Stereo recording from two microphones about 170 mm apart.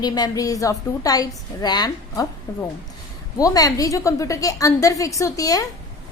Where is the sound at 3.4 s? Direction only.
20° left (ahead or behind).